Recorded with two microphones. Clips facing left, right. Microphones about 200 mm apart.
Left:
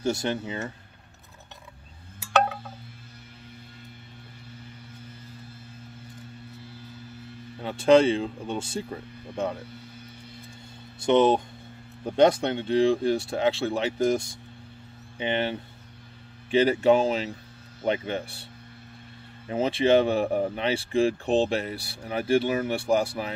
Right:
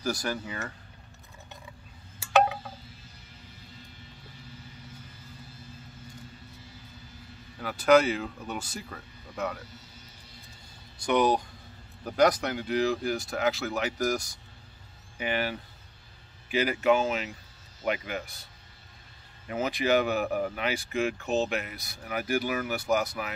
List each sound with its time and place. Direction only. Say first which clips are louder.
0.0 s speech: left 4 dB; 25° left (ahead or behind)
2.3 s a sound: right 1 dB; 5° right (ahead or behind)
7.6 s speech: left 3 dB; 25° left (ahead or behind)
11.0 s speech: left 5 dB; 25° left (ahead or behind)